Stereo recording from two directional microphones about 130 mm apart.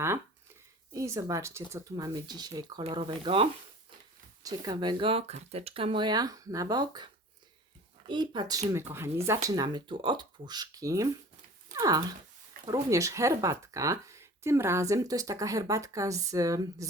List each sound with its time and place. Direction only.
0.9 s speech: 25° right (ahead or behind)
3.0 s speech: 45° right (ahead or behind)
4.4 s speech: 30° right (ahead or behind)
8.7 s speech: 20° right (ahead or behind)